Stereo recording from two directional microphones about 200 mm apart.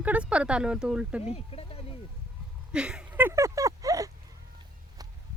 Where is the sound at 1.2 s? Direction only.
30° left (ahead or behind).